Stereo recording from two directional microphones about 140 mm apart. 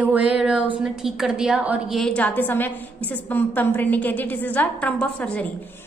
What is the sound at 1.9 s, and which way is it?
A woman's voice, 5° left (ahead or behind).